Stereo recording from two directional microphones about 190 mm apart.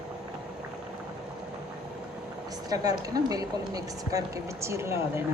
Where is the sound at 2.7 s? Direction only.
20° right (ahead or behind).